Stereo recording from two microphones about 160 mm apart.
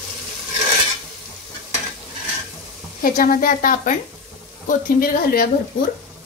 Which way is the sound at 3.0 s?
60° left (ahead or behind).